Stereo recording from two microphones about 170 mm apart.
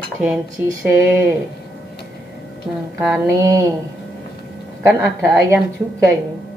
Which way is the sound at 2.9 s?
10° right (ahead or behind).